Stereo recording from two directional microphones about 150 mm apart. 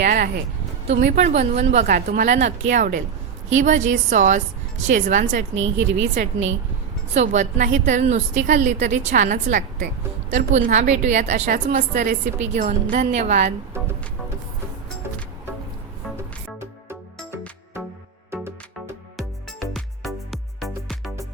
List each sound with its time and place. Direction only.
0.0 s speech: 75° right (ahead or behind)
0.9 s a woman's voice: 55° right (ahead or behind)
16.1 s music: 15° right (ahead or behind)
19.1 s music: centre (ahead or behind)